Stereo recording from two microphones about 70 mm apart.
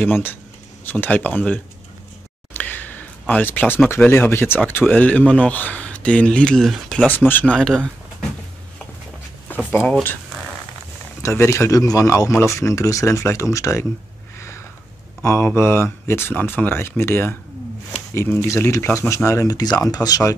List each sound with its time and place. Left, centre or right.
0.0 s speech: left
2.5 s a sound: left
4.1 s speech: left
4.9 s speech: left; by 7.1 s centre
7.1 s speech: left
7.5 s speech: centre
11.2 s speech: left
15.2 s speech: left